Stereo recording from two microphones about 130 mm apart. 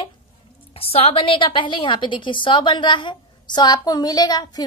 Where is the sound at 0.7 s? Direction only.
50° left (ahead or behind).